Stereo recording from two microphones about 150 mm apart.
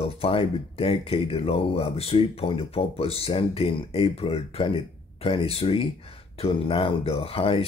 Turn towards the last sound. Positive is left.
turn(degrees=40)  # may be behind; listen again after turning